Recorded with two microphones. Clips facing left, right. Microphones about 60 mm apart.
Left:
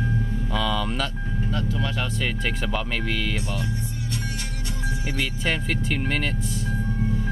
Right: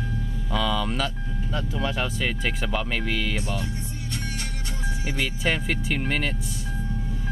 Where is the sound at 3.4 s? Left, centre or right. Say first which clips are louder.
Even; centre.